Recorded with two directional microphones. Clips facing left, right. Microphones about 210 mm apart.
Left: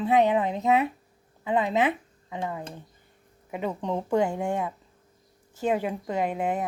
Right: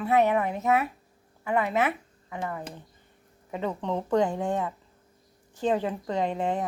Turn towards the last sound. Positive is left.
turn(degrees=10)  # may be behind; listen again after turning